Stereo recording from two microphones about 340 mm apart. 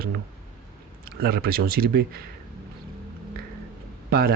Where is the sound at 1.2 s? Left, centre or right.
Right.